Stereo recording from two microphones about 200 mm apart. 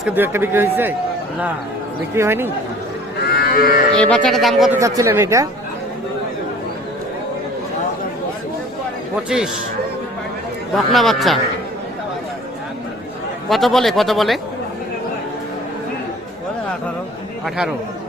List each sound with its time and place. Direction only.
0.0 s a man's voice: 10° right (ahead or behind)
2.1 s a man's voice: 10° right (ahead or behind)
3.3 s cattle: 50° left (ahead or behind)
3.9 s speech: 5° left (ahead or behind)
4.8 s a man's voice: 15° right (ahead or behind)
10.8 s speech: centre (ahead or behind)
13.5 s speech: centre (ahead or behind)